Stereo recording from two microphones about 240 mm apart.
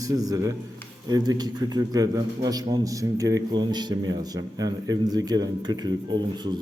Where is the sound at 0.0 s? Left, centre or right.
Centre.